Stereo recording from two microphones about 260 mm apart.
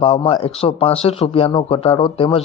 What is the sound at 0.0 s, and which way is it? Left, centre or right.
A man's voice, left.